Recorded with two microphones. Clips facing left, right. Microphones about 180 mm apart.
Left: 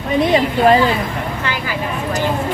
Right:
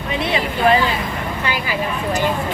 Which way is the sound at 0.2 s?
45° left (ahead or behind).